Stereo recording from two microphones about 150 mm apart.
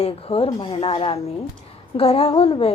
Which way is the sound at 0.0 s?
40° left (ahead or behind).